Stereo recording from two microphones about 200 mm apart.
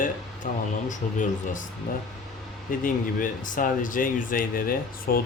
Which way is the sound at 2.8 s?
40° left (ahead or behind).